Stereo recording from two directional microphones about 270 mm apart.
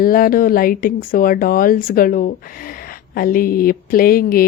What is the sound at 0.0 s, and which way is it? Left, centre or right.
Speech, left.